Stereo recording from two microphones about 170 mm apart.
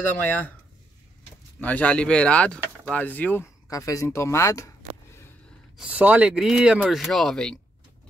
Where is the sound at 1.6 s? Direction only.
10° left (ahead or behind).